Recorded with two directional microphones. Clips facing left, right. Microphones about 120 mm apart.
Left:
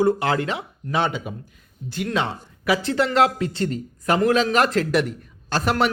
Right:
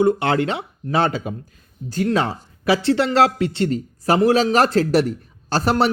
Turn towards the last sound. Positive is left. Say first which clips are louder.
# right 3 dB
turn(degrees=-35)  # may be behind; listen again after turning